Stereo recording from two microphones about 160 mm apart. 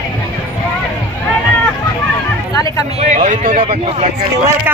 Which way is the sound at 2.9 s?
50° right (ahead or behind).